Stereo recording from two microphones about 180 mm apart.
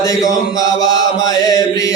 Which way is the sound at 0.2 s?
20° left (ahead or behind).